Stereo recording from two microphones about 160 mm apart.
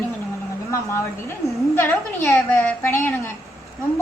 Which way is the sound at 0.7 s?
20° left (ahead or behind).